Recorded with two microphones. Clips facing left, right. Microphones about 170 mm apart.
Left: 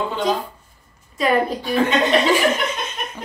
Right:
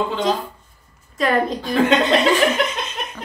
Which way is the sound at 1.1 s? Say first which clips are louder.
Even; 5° left (ahead or behind).